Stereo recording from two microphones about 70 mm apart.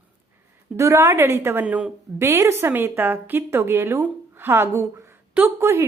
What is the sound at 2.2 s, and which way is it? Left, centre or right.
A woman's voice, right.